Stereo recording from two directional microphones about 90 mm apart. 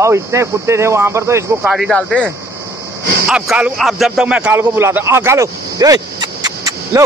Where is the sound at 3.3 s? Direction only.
10° right (ahead or behind).